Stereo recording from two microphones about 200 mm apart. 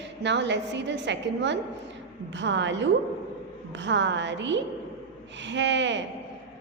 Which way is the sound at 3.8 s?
65° right (ahead or behind).